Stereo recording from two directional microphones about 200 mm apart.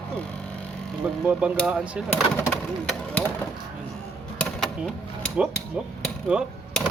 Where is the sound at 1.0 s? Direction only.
5° right (ahead or behind).